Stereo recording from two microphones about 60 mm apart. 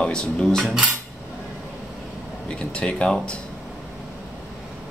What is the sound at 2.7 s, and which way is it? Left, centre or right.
Speech, centre.